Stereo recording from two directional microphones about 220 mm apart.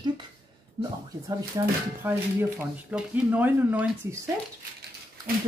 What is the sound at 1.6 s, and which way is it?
Speech, 15° right (ahead or behind).